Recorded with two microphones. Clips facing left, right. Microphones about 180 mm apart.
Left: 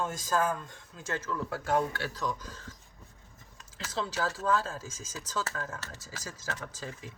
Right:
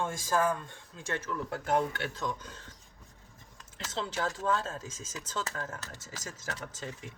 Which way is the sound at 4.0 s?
25° right (ahead or behind).